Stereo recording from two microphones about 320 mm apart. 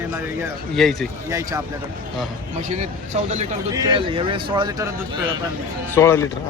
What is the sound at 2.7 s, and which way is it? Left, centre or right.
Speech, right.